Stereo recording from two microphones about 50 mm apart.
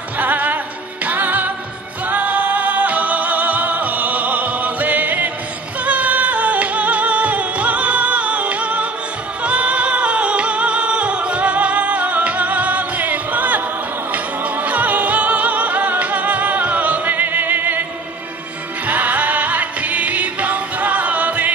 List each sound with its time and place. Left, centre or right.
0.2 s music: right
18.9 s music: right